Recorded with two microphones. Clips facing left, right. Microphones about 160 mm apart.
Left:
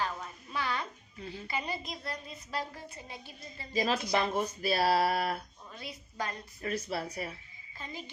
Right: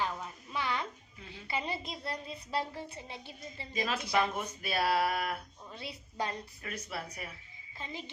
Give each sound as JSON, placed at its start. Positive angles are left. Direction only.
{"t": 0.0, "sound": "a sound", "side_deg": -20}
{"t": 1.5, "sound": "a woman's voice", "side_deg": -25}
{"t": 3.7, "sound": "speech", "side_deg": 30}
{"t": 5.7, "sound": "a woman's voice", "side_deg": -30}
{"t": 6.6, "sound": "speech", "side_deg": 35}
{"t": 7.8, "sound": "a woman's voice", "side_deg": -25}